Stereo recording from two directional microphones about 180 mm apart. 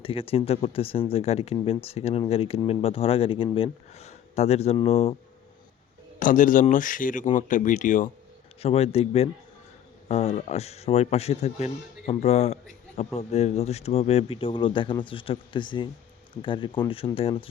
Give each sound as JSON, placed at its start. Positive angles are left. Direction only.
{"t": 0.0, "sound": "speech", "side_deg": 30}
{"t": 6.1, "sound": "speech", "side_deg": 45}
{"t": 8.6, "sound": "speech", "side_deg": 35}